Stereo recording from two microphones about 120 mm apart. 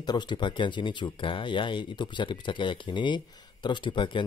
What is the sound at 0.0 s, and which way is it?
Speech, 35° left (ahead or behind).